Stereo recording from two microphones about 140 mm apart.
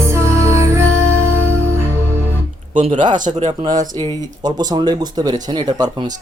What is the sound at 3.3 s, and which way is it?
Speech, 45° right (ahead or behind).